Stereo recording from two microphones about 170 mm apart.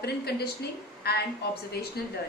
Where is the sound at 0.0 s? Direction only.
70° left (ahead or behind).